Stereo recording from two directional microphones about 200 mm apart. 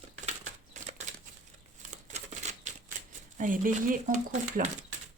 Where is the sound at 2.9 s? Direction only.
40° right (ahead or behind).